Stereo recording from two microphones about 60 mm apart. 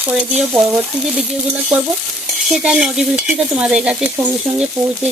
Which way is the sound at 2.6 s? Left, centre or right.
Centre.